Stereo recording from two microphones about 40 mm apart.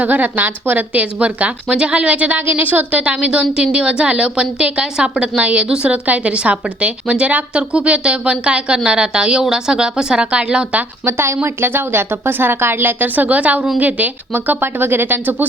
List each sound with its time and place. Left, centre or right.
0.0 s speech: right
0.9 s a woman's voice: right
2.5 s speech: right
2.9 s a woman's voice: right
5.4 s a woman's voice: right
5.6 s a woman's voice: right
5.9 s a woman's voice: right
7.5 s a woman's voice: right
11.0 s a woman's voice: right
11.6 s speech: right
13.1 s a woman's voice: right